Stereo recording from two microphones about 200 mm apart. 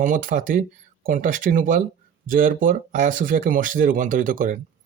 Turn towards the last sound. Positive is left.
turn(degrees=-40)  # may be behind; listen again after turning